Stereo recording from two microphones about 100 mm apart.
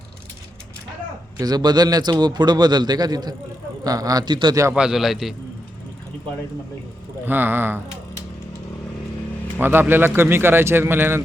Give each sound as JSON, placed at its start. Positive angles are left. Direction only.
{"t": 1.4, "sound": "a man's voice", "side_deg": -40}
{"t": 4.7, "sound": "a man's voice", "side_deg": -5}
{"t": 7.3, "sound": "speech", "side_deg": -20}
{"t": 9.6, "sound": "speech", "side_deg": -20}